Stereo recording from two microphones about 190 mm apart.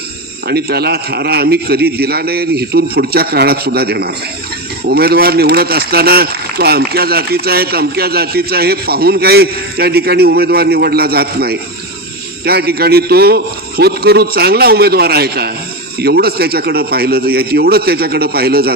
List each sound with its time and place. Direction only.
0.4 s speech: 55° right (ahead or behind)